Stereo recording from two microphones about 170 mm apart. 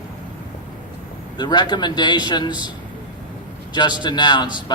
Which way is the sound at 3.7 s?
25° left (ahead or behind).